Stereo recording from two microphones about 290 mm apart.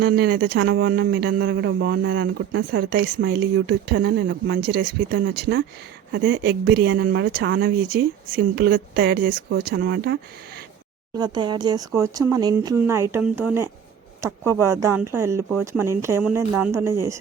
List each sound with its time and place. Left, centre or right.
0.0 s speech: right
11.2 s speech: centre